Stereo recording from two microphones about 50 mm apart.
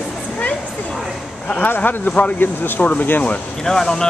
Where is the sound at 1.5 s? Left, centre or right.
Left.